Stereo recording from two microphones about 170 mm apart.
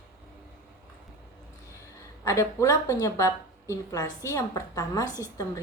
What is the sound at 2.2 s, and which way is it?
A woman's voice, 15° left (ahead or behind).